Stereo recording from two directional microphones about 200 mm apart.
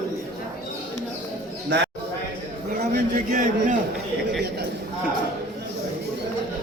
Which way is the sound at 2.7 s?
45° right (ahead or behind).